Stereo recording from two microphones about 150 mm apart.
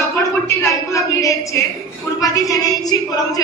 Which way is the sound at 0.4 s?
20° left (ahead or behind).